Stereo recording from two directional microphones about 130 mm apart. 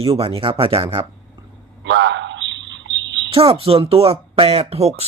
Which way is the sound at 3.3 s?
45° right (ahead or behind).